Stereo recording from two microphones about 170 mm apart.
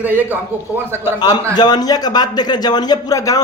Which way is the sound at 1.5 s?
25° left (ahead or behind).